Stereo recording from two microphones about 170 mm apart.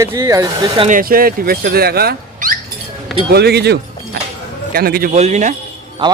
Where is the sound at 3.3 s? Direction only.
70° right (ahead or behind).